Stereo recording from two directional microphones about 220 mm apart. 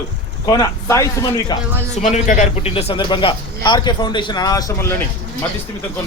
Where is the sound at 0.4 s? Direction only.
15° left (ahead or behind).